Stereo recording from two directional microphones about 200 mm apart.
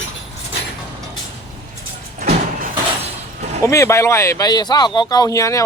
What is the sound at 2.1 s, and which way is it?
Vehicle, 35° right (ahead or behind).